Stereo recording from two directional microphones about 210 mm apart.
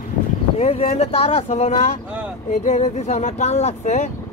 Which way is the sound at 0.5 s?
30° left (ahead or behind).